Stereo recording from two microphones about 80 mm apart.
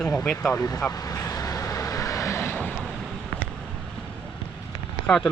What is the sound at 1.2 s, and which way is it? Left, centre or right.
Vehicle, left.